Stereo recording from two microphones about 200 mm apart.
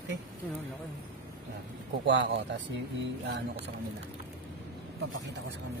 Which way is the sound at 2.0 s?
60° right (ahead or behind).